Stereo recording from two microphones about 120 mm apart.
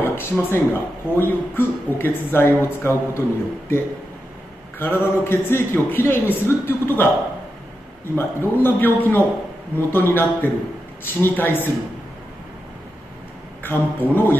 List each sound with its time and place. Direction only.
0.0 s speech: 20° left (ahead or behind)
8.2 s a man's voice: 20° left (ahead or behind)
13.6 s a man's voice: 15° left (ahead or behind)